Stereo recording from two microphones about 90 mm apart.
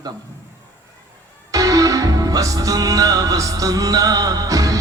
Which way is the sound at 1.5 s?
40° right (ahead or behind).